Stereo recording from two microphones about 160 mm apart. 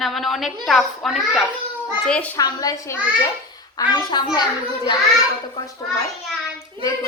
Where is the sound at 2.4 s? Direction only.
20° left (ahead or behind).